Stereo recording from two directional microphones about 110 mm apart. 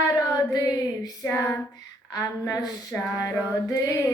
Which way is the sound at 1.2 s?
25° left (ahead or behind).